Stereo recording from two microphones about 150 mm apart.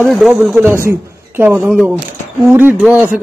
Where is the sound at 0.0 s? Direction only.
Centre (ahead or behind).